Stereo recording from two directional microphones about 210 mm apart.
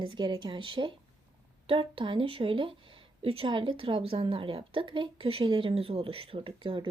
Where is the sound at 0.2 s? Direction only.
20° right (ahead or behind).